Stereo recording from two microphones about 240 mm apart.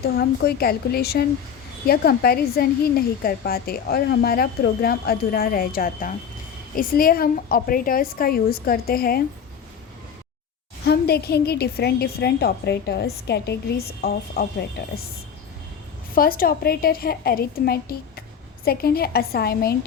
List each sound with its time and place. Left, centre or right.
0.2 s a woman's voice: left
10.8 s a woman's voice: left
16.1 s a woman's voice: left